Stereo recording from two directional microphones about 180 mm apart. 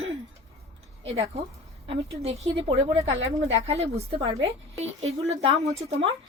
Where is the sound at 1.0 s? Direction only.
35° right (ahead or behind).